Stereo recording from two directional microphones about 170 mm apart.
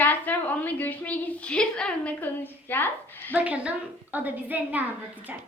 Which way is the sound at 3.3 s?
10° right (ahead or behind).